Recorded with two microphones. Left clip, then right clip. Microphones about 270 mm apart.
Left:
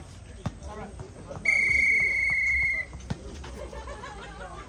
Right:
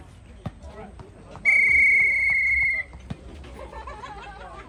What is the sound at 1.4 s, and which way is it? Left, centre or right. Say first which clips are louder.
Cricket: right 5 dB; right.